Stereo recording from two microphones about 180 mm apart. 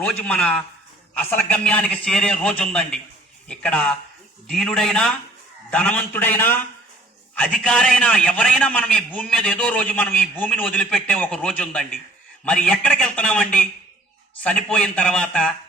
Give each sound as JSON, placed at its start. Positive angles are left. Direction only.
{"t": 0.0, "sound": "a man's voice", "side_deg": 5}